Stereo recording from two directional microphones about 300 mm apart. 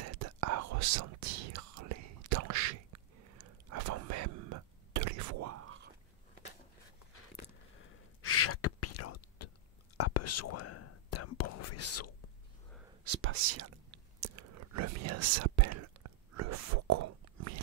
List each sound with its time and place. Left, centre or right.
0.2 s whispering: right
8.2 s gasp: left
9.9 s whispering: left
13.1 s whispering: right
14.2 s whispering: right